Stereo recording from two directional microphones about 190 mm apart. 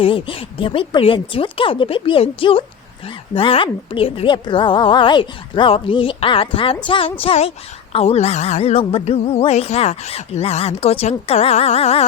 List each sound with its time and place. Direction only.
0.0 s speech: 30° left (ahead or behind)
7.9 s music: 35° left (ahead or behind)